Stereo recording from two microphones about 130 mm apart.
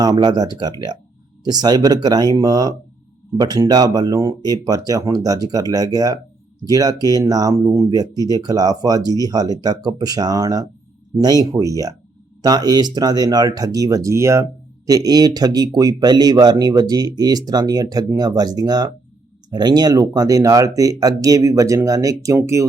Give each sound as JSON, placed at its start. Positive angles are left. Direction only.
{"t": 0.0, "sound": "speech", "side_deg": -30}